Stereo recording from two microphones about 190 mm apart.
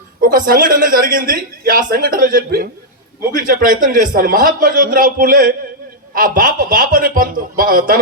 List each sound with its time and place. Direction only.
0.2 s speech: 50° right (ahead or behind)